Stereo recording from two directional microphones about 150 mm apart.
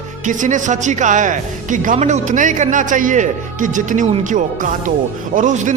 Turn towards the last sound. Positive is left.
turn(degrees=-55)  # may be behind; listen again after turning